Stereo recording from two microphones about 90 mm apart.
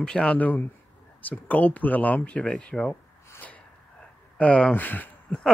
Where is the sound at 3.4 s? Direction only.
15° left (ahead or behind).